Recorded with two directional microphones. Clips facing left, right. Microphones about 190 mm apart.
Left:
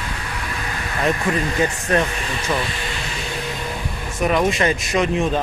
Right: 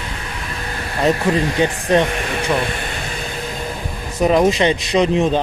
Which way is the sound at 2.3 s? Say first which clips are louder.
Right 3 dB; 60° right (ahead or behind).